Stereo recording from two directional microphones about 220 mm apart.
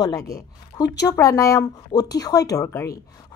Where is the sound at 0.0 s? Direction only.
15° left (ahead or behind).